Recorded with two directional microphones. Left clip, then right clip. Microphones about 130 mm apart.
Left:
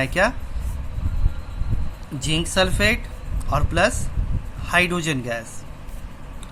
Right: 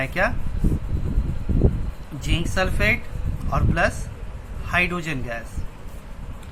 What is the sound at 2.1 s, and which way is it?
Speech, 50° left (ahead or behind).